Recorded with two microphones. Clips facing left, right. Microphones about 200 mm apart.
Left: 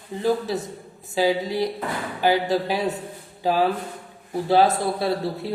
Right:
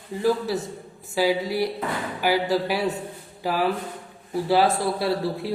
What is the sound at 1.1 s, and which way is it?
Speech, 20° left (ahead or behind).